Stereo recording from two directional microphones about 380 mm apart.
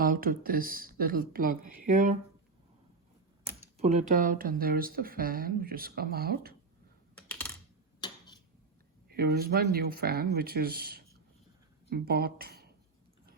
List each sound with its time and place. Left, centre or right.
0.0 s speech: right
3.8 s speech: centre
7.2 s computer keyboard: centre
9.0 s speech: right